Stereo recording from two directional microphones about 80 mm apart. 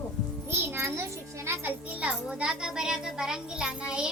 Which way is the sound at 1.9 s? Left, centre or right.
Centre.